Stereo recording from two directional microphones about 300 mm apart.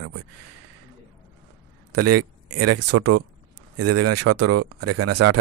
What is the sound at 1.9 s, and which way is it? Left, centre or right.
A man's voice, right.